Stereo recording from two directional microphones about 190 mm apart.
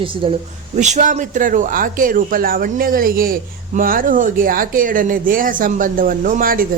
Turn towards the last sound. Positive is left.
turn(degrees=-50)  # may be behind; listen again after turning